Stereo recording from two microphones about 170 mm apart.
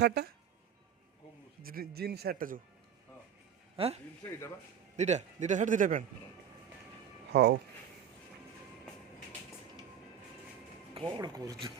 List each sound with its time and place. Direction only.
0.0 s speech: 75° right (ahead or behind)
1.6 s speech: 60° right (ahead or behind)
3.8 s a man's voice: 35° right (ahead or behind)
7.3 s speech: 75° right (ahead or behind)
10.9 s speech: 25° right (ahead or behind)